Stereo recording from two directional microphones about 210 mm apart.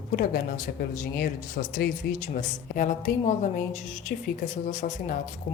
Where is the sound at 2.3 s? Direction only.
40° left (ahead or behind).